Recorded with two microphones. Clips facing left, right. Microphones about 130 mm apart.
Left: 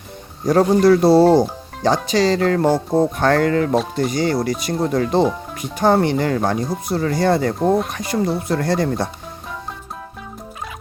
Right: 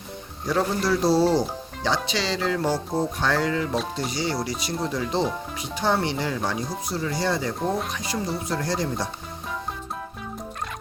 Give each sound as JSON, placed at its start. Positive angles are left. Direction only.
{"t": 0.4, "sound": "speech", "side_deg": 45}